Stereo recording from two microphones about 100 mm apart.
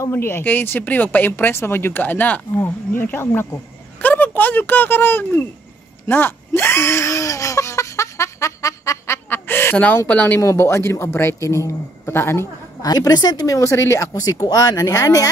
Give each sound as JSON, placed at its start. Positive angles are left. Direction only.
{"t": 0.0, "sound": "speech", "side_deg": 25}
{"t": 6.0, "sound": "a sound", "side_deg": 20}
{"t": 10.4, "sound": "speech", "side_deg": 25}
{"t": 12.8, "sound": "speech", "side_deg": 40}